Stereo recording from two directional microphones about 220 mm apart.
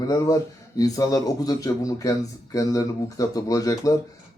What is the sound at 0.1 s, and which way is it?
Speech, 15° left (ahead or behind).